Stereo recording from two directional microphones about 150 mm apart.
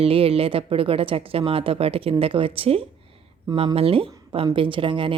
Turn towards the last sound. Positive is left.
turn(degrees=-35)  # may be behind; listen again after turning